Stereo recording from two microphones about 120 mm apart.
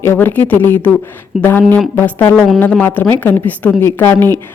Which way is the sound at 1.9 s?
15° left (ahead or behind).